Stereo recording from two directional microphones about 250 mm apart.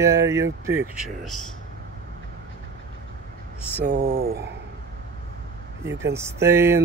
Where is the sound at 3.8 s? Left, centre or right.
Right.